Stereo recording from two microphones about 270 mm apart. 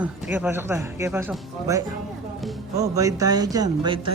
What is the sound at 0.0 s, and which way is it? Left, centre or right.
Speech, centre.